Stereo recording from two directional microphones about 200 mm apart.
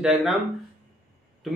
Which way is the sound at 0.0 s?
Centre (ahead or behind).